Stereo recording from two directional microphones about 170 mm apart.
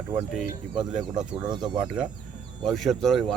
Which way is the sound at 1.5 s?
25° right (ahead or behind).